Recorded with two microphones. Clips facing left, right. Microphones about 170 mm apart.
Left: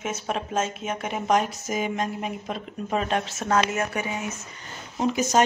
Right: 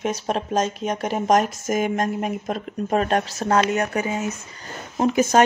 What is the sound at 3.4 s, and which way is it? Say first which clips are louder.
Speech: right 3 dB; 35° right (ahead or behind).